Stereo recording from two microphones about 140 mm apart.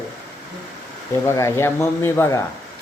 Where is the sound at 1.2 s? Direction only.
20° left (ahead or behind).